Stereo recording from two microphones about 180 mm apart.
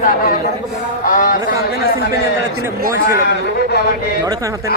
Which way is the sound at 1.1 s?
50° left (ahead or behind).